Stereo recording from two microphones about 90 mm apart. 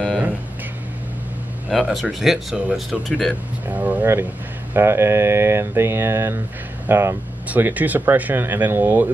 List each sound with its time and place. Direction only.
1.7 s speech: centre (ahead or behind)
3.6 s speech: 20° right (ahead or behind)
7.4 s speech: 20° right (ahead or behind)